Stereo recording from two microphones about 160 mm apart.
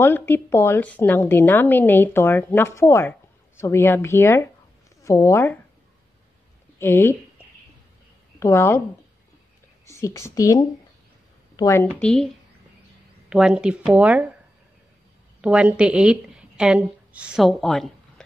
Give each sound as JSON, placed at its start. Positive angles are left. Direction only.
{"t": 0.0, "sound": "a woman's voice", "side_deg": 15}
{"t": 6.8, "sound": "a woman's voice", "side_deg": 15}
{"t": 8.4, "sound": "a woman's voice", "side_deg": 20}
{"t": 9.8, "sound": "a woman's voice", "side_deg": 20}
{"t": 12.0, "sound": "speech", "side_deg": 5}
{"t": 13.3, "sound": "speech", "side_deg": -5}
{"t": 15.4, "sound": "a woman's voice", "side_deg": -5}